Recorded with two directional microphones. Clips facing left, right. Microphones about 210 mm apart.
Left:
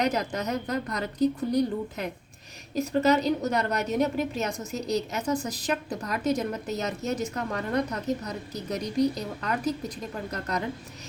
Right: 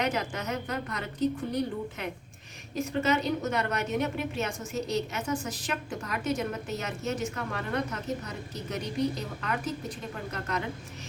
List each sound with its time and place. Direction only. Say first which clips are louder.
0.0 s a woman's voice: left 3 dB; 40° left (ahead or behind)